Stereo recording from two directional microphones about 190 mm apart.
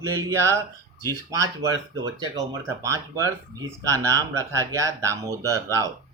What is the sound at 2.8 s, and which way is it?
Speech, 15° right (ahead or behind).